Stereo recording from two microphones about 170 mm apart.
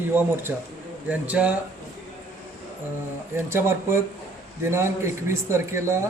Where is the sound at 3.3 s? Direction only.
15° right (ahead or behind).